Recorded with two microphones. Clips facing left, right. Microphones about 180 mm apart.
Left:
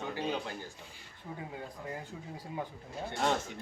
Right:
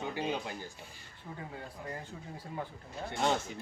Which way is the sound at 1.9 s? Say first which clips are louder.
Left 1 dB; 10° left (ahead or behind).